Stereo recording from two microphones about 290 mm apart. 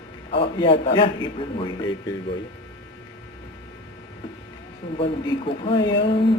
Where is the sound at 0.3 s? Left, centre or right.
Centre.